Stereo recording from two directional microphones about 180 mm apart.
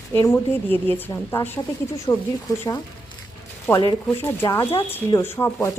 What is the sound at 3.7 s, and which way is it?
Speech, 10° left (ahead or behind).